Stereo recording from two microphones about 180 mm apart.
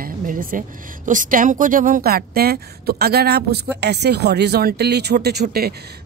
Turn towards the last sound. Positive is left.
turn(degrees=-65)  # may be behind; listen again after turning